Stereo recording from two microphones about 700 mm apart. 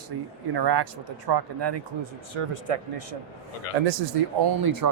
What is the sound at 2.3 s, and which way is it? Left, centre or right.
Speech, right.